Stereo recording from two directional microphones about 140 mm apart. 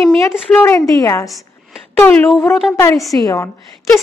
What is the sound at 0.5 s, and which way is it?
Speech, 15° left (ahead or behind).